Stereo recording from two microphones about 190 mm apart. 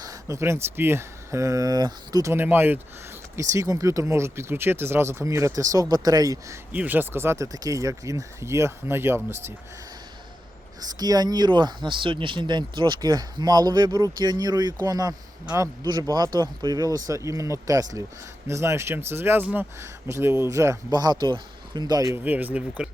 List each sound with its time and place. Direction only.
0.0 s speech: 15° right (ahead or behind)
10.8 s speech: 20° right (ahead or behind)